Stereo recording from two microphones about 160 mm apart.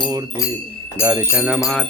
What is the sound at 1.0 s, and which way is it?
Music, 20° right (ahead or behind).